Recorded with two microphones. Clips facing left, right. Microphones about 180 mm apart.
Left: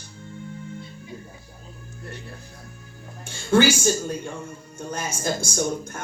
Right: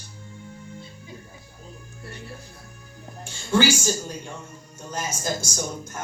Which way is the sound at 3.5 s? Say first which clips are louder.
Left 3 dB; 55° left (ahead or behind).